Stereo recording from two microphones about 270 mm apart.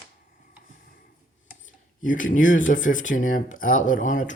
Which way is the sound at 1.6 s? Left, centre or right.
Left.